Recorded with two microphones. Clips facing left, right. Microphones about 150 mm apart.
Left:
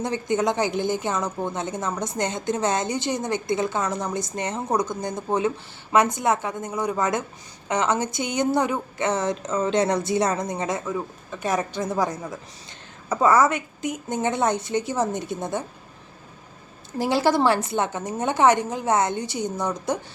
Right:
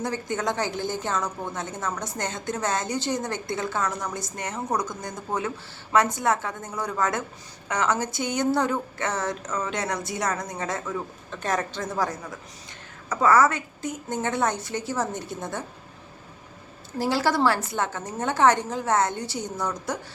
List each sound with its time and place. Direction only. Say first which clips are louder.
0.0 s a woman's voice: left 4 dB; 20° left (ahead or behind)
17.0 s a woman's voice: left 2 dB; 20° left (ahead or behind)